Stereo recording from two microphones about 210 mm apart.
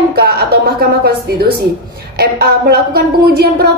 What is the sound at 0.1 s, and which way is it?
A woman's voice, 50° right (ahead or behind).